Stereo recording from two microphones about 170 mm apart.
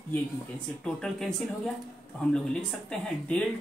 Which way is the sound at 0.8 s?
5° left (ahead or behind).